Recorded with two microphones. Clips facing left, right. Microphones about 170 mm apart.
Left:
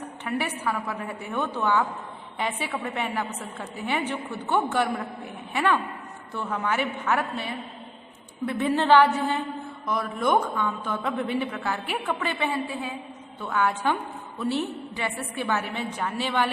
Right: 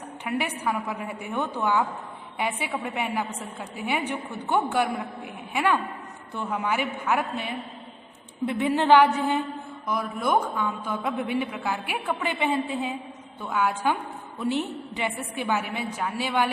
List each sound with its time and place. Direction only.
0.3 s a man's voice: 15° right (ahead or behind)
13.4 s a man's voice: 10° right (ahead or behind)